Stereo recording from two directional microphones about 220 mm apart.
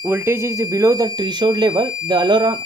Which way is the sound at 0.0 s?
10° right (ahead or behind).